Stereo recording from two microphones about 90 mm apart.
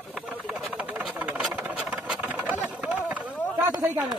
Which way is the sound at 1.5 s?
20° right (ahead or behind).